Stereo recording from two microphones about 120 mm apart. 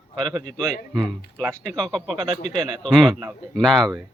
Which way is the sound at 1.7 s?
5° left (ahead or behind).